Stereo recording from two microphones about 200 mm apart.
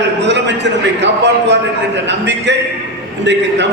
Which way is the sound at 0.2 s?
60° right (ahead or behind).